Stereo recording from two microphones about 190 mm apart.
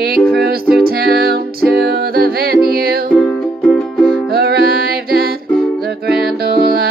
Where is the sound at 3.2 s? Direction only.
5° left (ahead or behind).